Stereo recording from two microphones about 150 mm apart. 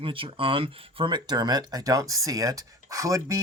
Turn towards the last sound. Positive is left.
turn(degrees=-20)  # may be behind; listen again after turning